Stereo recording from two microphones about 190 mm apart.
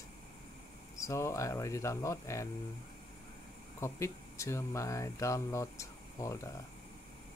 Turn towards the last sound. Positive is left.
turn(degrees=15)  # may be behind; listen again after turning